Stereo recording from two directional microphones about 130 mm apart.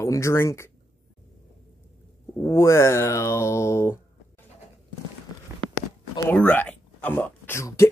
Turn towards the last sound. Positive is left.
turn(degrees=20)  # may be behind; listen again after turning